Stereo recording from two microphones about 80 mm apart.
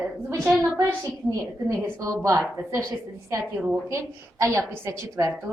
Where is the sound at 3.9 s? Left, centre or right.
Right.